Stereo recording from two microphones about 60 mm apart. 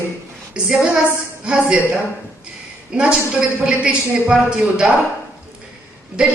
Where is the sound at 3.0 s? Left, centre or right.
Centre.